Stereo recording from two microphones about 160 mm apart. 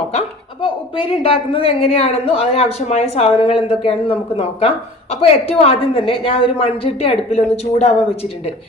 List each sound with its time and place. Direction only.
0.6 s a woman's voice: 35° left (ahead or behind)